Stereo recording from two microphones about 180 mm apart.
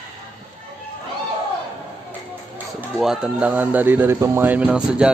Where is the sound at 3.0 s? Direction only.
5° right (ahead or behind).